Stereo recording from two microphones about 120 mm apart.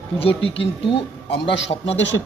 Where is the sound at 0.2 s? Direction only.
50° left (ahead or behind).